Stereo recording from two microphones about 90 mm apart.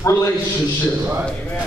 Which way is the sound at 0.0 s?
40° left (ahead or behind).